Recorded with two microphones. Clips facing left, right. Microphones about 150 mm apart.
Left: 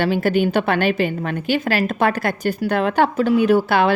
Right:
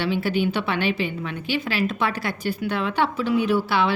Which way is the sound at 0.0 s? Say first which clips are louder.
Left 5 dB; 45° left (ahead or behind).